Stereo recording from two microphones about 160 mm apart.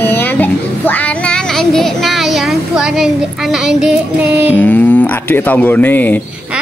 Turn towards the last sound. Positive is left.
turn(degrees=10)  # may be behind; listen again after turning